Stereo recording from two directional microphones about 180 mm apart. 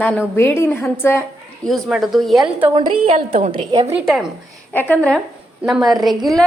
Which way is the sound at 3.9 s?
5° right (ahead or behind).